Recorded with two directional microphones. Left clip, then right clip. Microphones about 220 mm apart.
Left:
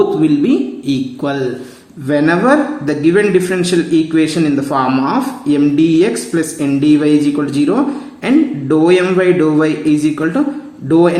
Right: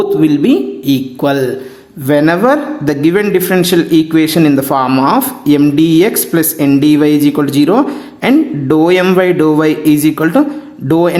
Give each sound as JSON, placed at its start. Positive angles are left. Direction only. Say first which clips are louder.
{"t": 0.2, "sound": "a man's voice", "louder": "right 3 dB", "side_deg": -40}